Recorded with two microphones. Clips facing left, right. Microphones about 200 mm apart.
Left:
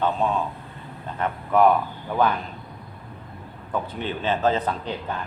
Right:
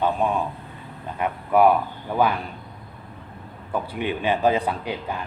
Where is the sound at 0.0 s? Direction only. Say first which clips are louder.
Right 1 dB; 15° right (ahead or behind).